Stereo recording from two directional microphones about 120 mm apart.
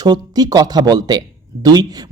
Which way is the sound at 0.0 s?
35° right (ahead or behind).